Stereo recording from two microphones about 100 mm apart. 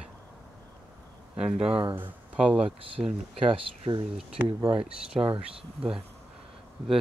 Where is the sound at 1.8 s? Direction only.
50° right (ahead or behind).